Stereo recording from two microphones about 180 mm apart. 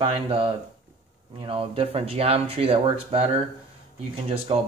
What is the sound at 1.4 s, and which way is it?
Speech, 30° right (ahead or behind).